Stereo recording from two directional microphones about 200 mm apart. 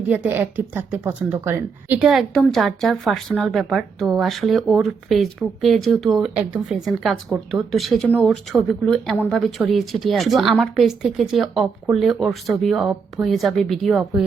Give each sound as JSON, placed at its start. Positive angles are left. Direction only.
{"t": 0.1, "sound": "a woman's voice", "side_deg": -10}